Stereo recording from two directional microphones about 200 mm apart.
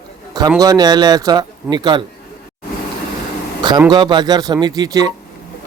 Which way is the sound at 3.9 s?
20° right (ahead or behind).